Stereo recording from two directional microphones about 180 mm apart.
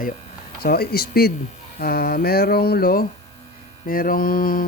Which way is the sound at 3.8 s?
55° left (ahead or behind).